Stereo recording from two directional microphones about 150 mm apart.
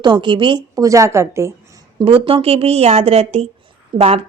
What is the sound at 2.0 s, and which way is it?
A woman's voice, 35° right (ahead or behind).